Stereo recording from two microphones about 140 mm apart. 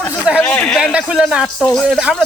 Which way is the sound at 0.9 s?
5° right (ahead or behind).